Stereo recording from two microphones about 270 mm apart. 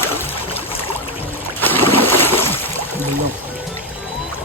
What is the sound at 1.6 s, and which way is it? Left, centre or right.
Boat, centre.